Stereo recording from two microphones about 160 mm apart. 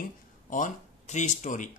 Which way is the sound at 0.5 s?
50° left (ahead or behind).